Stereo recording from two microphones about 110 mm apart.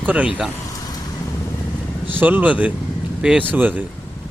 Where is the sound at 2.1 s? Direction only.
15° right (ahead or behind).